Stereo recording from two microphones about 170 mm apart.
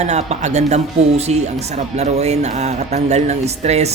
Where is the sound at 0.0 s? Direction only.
40° right (ahead or behind).